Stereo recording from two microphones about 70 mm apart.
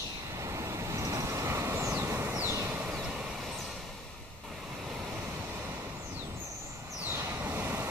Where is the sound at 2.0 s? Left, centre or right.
Right.